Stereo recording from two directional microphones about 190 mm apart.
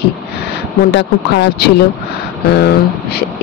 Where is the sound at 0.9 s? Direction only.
60° left (ahead or behind).